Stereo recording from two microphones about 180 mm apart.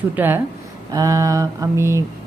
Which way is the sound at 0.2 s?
10° right (ahead or behind).